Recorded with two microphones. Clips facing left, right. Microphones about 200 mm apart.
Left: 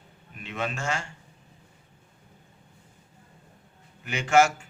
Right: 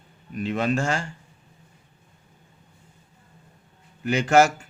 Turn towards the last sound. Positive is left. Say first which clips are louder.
# right 3 dB
turn(degrees=-40)  # may be behind; listen again after turning